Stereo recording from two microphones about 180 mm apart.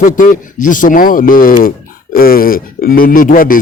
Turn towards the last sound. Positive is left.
turn(degrees=50)  # may be behind; listen again after turning